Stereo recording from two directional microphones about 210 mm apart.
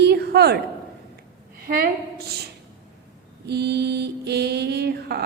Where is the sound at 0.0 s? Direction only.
50° right (ahead or behind).